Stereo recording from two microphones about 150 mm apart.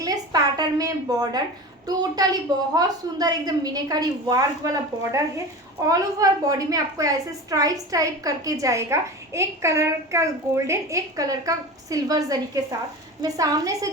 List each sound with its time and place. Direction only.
0.0 s a woman's voice: 25° right (ahead or behind)